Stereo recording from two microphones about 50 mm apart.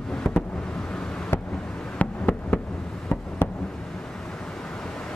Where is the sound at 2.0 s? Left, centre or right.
Left.